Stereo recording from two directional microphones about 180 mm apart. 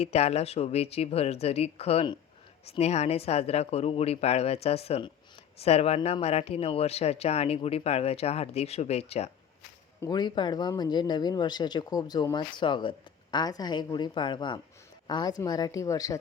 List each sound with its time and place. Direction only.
0.0 s speech: 35° left (ahead or behind)
10.0 s speech: 20° left (ahead or behind)